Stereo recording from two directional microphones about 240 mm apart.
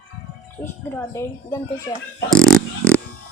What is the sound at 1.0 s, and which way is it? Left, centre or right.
Speech, centre.